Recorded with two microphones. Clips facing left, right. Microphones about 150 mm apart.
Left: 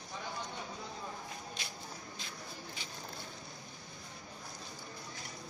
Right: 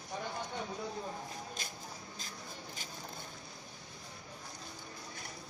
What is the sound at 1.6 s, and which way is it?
Shuffle, 45° right (ahead or behind).